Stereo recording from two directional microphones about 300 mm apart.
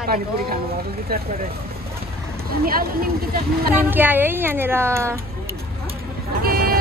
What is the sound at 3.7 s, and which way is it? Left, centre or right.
A woman's voice, centre.